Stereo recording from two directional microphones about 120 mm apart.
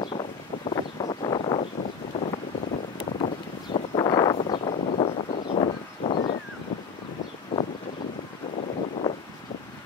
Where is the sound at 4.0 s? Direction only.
35° left (ahead or behind).